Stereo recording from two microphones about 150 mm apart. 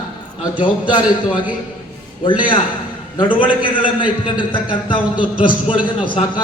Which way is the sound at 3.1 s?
35° left (ahead or behind).